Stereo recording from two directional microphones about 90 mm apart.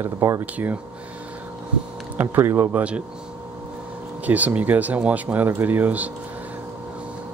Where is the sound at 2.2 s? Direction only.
25° right (ahead or behind).